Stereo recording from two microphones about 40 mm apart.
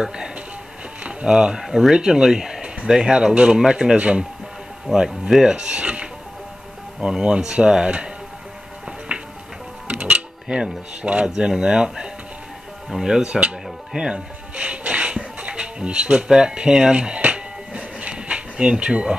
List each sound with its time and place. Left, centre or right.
0.0 s speech: right
9.1 s music: right
11.2 s speech: centre
13.9 s music: right